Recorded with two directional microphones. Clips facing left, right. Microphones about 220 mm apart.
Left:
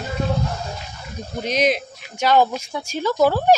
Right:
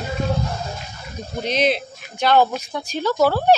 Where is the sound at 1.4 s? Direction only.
10° left (ahead or behind).